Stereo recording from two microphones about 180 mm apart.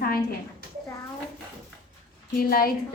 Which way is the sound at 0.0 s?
55° left (ahead or behind).